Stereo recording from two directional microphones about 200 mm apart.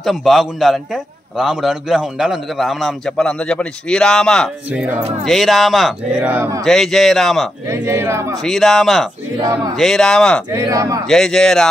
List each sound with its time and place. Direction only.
0.0 s a man's voice: centre (ahead or behind)
6.6 s a man's voice: centre (ahead or behind)
7.7 s speech: 10° right (ahead or behind)
8.5 s a man's voice: centre (ahead or behind)
9.4 s speech: 20° right (ahead or behind)
9.8 s a man's voice: centre (ahead or behind)
10.5 s speech: 15° right (ahead or behind)
11.1 s a man's voice: centre (ahead or behind)